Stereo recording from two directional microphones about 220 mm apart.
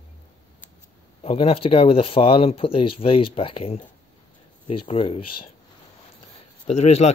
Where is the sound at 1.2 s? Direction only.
25° left (ahead or behind).